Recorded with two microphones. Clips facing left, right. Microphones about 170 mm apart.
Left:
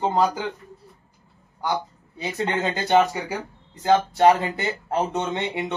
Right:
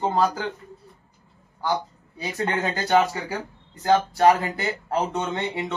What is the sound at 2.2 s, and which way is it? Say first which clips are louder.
Speech: left 1 dB; 20° left (ahead or behind).